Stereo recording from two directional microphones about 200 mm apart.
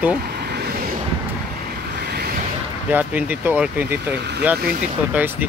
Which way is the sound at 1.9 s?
55° right (ahead or behind).